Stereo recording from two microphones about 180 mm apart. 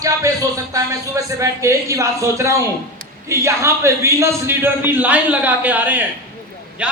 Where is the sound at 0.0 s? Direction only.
20° right (ahead or behind).